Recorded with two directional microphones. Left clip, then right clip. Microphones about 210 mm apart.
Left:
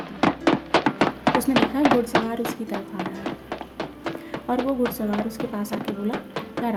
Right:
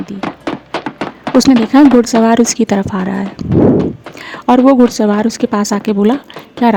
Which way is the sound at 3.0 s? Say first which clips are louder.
Right 10 dB; centre (ahead or behind).